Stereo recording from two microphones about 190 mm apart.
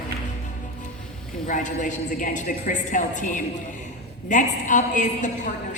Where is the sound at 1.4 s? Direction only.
40° left (ahead or behind).